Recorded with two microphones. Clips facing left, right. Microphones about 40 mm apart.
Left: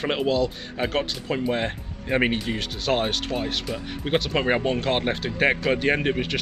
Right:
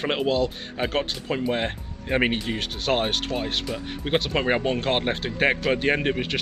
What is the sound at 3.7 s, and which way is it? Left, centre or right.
Speech, centre.